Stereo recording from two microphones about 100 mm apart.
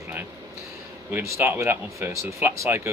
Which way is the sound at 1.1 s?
25° right (ahead or behind).